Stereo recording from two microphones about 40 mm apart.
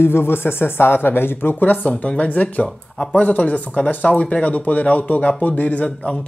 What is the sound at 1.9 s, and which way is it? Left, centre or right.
Speech, left.